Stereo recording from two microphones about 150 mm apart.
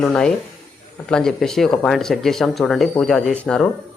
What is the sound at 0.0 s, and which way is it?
Speech, 5° left (ahead or behind).